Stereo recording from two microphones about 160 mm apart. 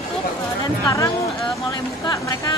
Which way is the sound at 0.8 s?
20° left (ahead or behind).